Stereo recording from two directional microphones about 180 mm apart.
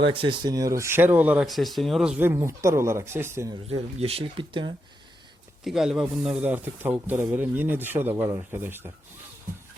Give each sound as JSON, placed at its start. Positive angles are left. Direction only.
{"t": 0.0, "sound": "speech", "side_deg": -30}
{"t": 3.7, "sound": "speech", "side_deg": -35}
{"t": 5.6, "sound": "speech", "side_deg": 0}